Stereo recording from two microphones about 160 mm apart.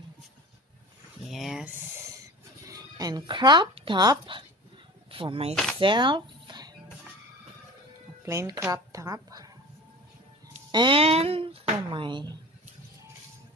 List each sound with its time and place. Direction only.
1.3 s speech: centre (ahead or behind)
2.6 s speech: 20° right (ahead or behind)
5.5 s speech: 5° left (ahead or behind)
5.8 s a sound: 30° right (ahead or behind)
8.3 s speech: 20° right (ahead or behind)
10.7 s speech: 30° right (ahead or behind)